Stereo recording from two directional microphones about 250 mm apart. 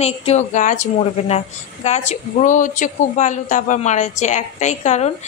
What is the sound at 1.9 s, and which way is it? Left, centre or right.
Speech, left.